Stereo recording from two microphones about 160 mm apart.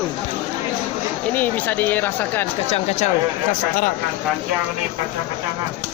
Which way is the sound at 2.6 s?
40° left (ahead or behind).